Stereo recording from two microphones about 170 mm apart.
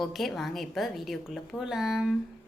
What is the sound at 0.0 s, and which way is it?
Speech, centre (ahead or behind).